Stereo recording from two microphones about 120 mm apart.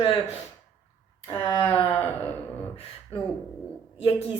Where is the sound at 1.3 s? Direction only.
20° left (ahead or behind).